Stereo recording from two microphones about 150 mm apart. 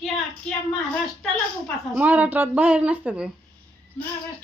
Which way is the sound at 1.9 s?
10° right (ahead or behind).